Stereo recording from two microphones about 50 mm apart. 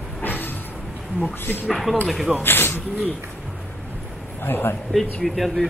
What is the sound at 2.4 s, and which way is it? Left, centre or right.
Speech, left.